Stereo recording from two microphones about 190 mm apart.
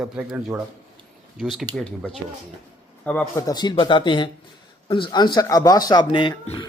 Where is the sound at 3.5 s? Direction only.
20° left (ahead or behind).